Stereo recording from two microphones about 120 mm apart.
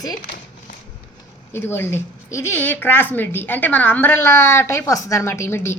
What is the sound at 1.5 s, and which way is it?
Speech, 20° left (ahead or behind).